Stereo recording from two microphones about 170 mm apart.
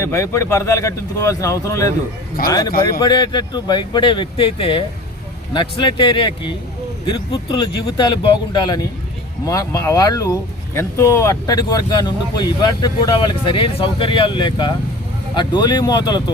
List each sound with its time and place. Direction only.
0.0 s speech: 15° left (ahead or behind)